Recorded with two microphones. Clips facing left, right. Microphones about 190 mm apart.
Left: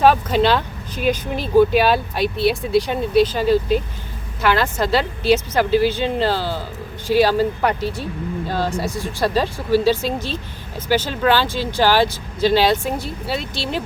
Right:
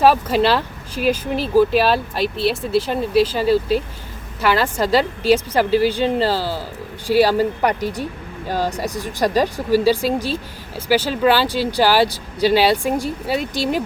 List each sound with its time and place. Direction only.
0.0 s a woman's voice: 5° right (ahead or behind)
4.9 s a woman's voice: 40° right (ahead or behind)
7.1 s a woman's voice: 10° right (ahead or behind)